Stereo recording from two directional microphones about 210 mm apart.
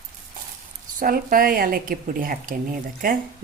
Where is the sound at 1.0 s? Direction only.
45° right (ahead or behind).